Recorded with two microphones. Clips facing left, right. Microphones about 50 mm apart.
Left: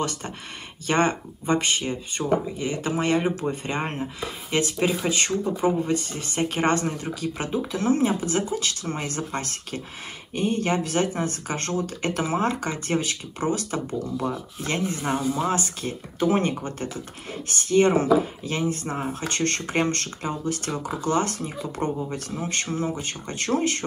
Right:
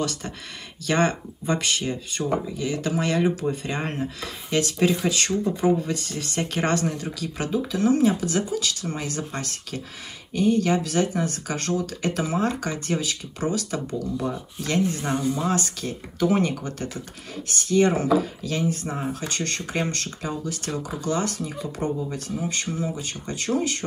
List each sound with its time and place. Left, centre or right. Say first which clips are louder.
0.0 s speech: even; left
18.9 s speech: even; centre
19.2 s speech: left 3 dB; left